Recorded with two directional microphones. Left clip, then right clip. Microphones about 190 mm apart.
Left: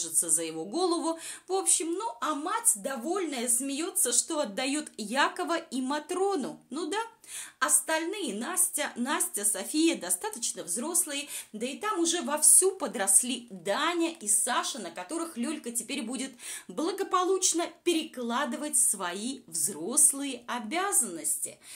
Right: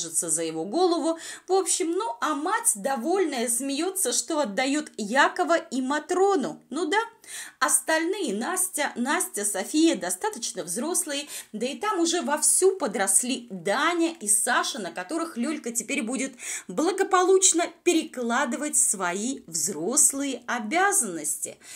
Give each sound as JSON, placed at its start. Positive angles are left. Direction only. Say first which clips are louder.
{"t": 0.0, "sound": "a woman's voice", "louder": "right 3 dB", "side_deg": -15}